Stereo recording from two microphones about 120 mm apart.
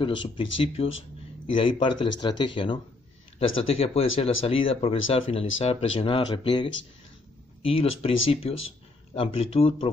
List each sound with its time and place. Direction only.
0.0 s speech: 45° left (ahead or behind)